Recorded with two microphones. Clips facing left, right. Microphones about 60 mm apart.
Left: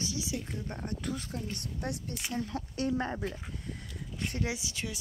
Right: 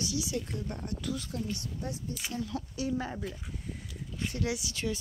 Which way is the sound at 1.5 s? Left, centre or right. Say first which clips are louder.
Left 1 dB; left.